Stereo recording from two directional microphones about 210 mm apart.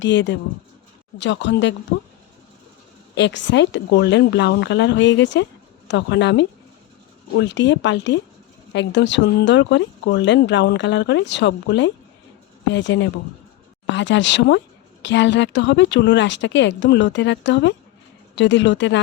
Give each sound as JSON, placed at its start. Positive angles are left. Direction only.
{"t": 0.0, "sound": "speech", "side_deg": 60}
{"t": 3.2, "sound": "speech", "side_deg": 55}